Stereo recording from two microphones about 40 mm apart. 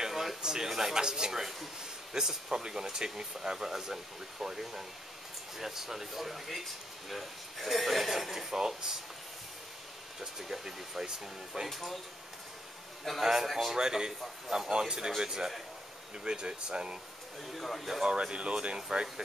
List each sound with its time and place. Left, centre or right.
0.0 s a sound: centre
0.4 s speech: centre
10.2 s speech: centre
11.7 s speech: centre
13.2 s speech: centre
13.7 s speech: centre
17.6 s speech: centre
18.0 s speech: right